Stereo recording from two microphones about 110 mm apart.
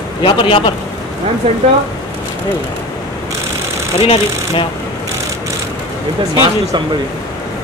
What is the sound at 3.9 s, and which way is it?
Speech, 50° left (ahead or behind).